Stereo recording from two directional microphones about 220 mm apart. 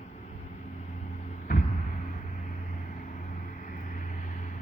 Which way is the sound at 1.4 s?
35° left (ahead or behind).